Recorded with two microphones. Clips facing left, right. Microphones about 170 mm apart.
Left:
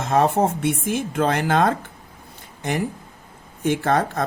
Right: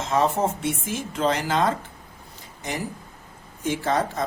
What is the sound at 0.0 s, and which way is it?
A woman's voice, 55° left (ahead or behind).